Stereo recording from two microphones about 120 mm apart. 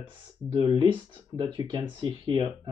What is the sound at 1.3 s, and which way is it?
Speech, 40° right (ahead or behind).